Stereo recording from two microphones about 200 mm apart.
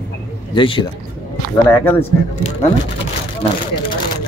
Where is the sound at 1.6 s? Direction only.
10° left (ahead or behind).